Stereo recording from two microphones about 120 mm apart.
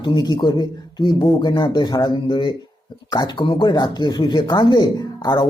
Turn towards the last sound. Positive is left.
turn(degrees=35)  # may be behind; listen again after turning